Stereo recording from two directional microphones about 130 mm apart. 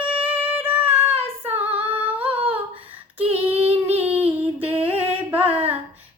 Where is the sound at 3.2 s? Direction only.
50° right (ahead or behind).